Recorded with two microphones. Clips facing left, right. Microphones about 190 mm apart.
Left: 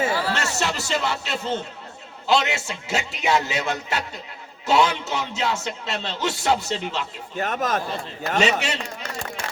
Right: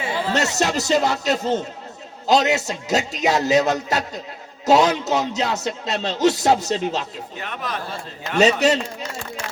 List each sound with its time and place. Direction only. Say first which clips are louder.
0.1 s a sound: even; 20° right (ahead or behind)
0.5 s speech: right 6 dB; 40° right (ahead or behind)
7.3 s speech: left 6 dB; 45° left (ahead or behind)
8.4 s speech: right 7 dB; 40° right (ahead or behind)